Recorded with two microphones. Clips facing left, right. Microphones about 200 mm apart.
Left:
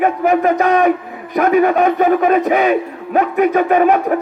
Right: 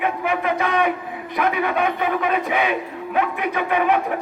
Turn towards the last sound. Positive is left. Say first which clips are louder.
# left 7 dB
turn(degrees=45)  # may be behind; listen again after turning